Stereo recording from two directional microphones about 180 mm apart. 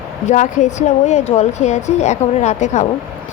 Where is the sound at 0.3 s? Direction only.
40° left (ahead or behind).